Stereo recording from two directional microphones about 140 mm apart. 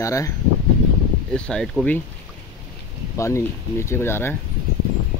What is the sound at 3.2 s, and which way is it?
Speech, 20° left (ahead or behind).